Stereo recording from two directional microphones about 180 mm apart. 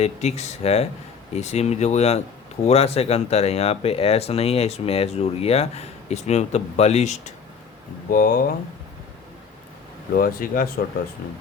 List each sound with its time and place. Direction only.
0.0 s speech: 35° left (ahead or behind)
8.1 s speech: 50° left (ahead or behind)
10.2 s speech: 50° left (ahead or behind)